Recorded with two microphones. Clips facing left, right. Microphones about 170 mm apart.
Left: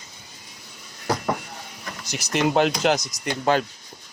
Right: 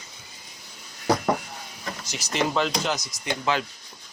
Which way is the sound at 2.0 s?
60° left (ahead or behind).